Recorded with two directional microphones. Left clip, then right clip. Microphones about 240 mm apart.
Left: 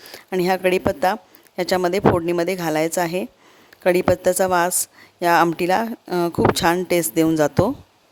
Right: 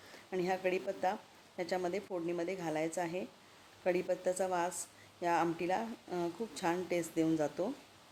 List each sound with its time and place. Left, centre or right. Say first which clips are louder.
0.3 s a woman's voice: left 16 dB; left